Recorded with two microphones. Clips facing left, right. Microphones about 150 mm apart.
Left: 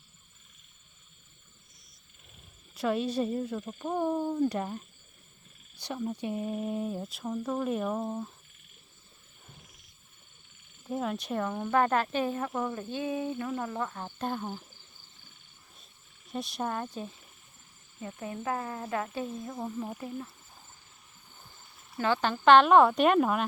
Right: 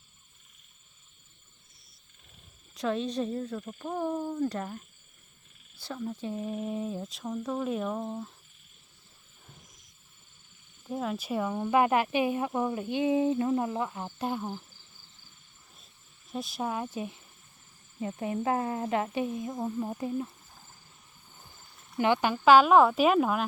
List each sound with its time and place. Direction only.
2.7 s speech: 5° left (ahead or behind)
5.7 s speech: 15° left (ahead or behind)
10.8 s speech: centre (ahead or behind)
16.3 s speech: centre (ahead or behind)
18.0 s speech: 20° right (ahead or behind)
19.5 s speech: centre (ahead or behind)
19.9 s speech: 20° right (ahead or behind)
21.9 s speech: 15° right (ahead or behind)